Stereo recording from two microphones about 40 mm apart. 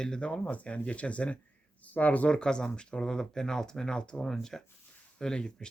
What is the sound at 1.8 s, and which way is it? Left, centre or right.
Speech, left.